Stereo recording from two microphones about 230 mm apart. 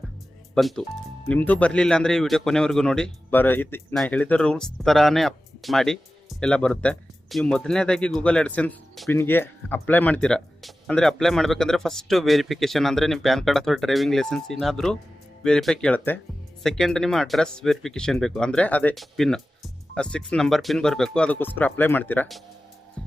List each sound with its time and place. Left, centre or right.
0.5 s speech: centre